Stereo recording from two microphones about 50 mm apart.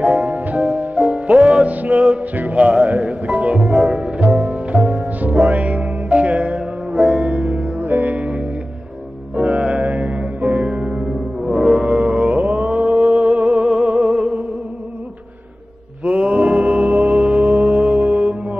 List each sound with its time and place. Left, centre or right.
0.3 s music: right
3.5 s music: centre
7.2 s music: right
11.1 s music: centre
11.6 s music: centre
16.0 s music: right
17.5 s music: right